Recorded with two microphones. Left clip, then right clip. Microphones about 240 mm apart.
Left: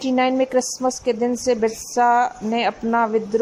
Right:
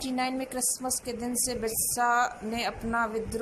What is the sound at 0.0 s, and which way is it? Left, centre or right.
A woman's voice, left.